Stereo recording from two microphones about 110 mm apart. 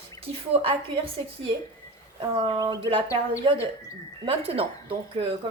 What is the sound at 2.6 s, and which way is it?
Speech, 40° right (ahead or behind).